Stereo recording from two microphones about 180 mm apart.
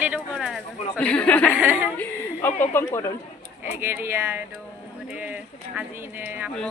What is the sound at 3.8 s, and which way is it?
Speech, 15° right (ahead or behind).